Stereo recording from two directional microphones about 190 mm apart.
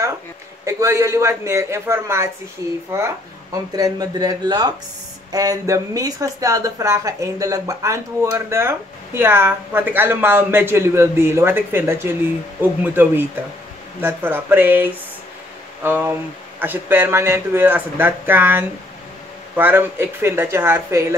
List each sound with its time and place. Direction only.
0.7 s speech: 15° right (ahead or behind)